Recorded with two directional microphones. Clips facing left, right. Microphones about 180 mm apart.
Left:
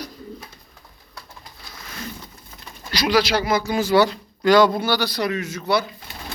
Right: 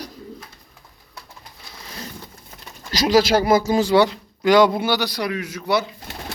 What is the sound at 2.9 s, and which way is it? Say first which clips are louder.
Speech: right 3 dB; 40° right (ahead or behind).